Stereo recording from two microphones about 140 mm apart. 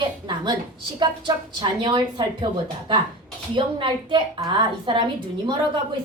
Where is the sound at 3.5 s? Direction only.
35° right (ahead or behind).